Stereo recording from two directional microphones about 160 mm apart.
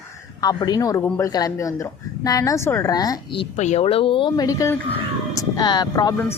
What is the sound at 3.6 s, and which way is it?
Speech, 45° left (ahead or behind).